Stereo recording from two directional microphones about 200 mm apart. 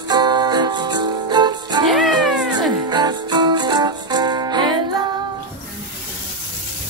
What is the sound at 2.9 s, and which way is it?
Music, 20° right (ahead or behind).